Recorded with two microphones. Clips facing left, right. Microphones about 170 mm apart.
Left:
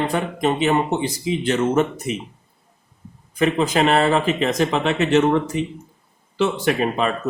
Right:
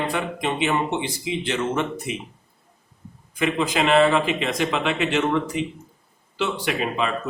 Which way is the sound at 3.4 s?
40° left (ahead or behind).